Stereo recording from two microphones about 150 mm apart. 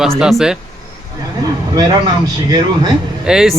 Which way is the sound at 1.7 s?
25° right (ahead or behind).